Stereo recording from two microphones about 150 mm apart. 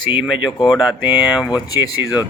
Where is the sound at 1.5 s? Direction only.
25° left (ahead or behind).